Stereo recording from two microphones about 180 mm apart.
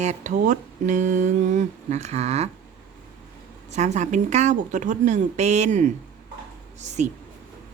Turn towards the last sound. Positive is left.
turn(degrees=-40)  # may be behind; listen again after turning